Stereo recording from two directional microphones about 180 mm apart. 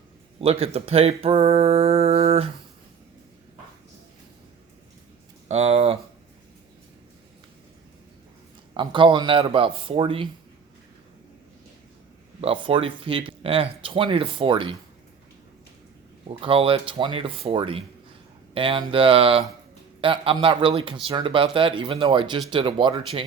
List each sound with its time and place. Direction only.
0.3 s speech: 35° right (ahead or behind)
5.5 s speech: 35° right (ahead or behind)
8.7 s speech: 25° right (ahead or behind)
12.4 s speech: 30° right (ahead or behind)
16.4 s speech: 30° right (ahead or behind)